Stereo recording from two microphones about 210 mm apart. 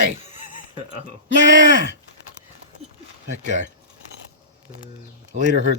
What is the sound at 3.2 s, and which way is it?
Speech, 35° right (ahead or behind).